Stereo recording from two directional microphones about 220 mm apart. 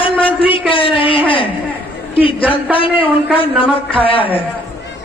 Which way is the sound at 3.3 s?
25° left (ahead or behind).